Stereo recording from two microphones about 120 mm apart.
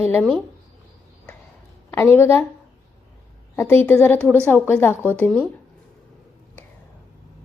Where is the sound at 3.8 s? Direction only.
15° left (ahead or behind).